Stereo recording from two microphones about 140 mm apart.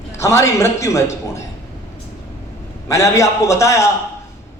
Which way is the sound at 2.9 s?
20° left (ahead or behind).